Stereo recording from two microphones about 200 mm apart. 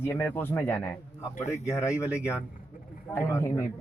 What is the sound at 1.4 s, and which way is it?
Speech, 35° left (ahead or behind).